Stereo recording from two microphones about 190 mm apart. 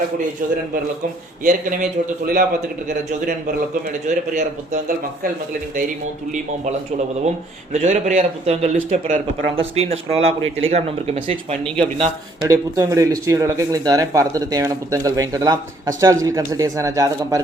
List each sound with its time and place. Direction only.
1.5 s a man's voice: 45° right (ahead or behind)
7.7 s a man's voice: 40° right (ahead or behind)
11.9 s a man's voice: 20° right (ahead or behind)